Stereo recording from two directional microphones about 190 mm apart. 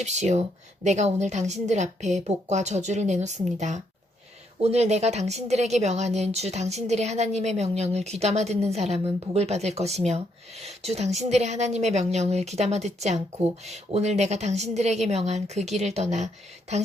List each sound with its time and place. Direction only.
0.0 s speech: 35° right (ahead or behind)